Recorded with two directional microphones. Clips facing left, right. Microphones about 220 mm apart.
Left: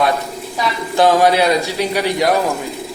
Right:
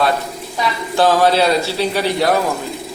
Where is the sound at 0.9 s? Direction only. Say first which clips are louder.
Left 1 dB; 15° left (ahead or behind).